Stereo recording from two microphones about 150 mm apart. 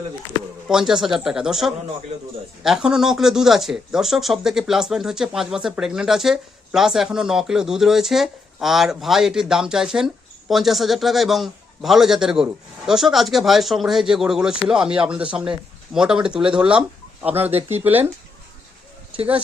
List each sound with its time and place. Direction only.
0.7 s speech: 5° right (ahead or behind)
17.5 s speech: 45° right (ahead or behind)
17.8 s speech: 15° right (ahead or behind)